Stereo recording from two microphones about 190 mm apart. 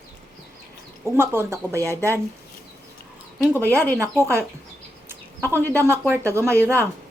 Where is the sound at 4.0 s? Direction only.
15° right (ahead or behind).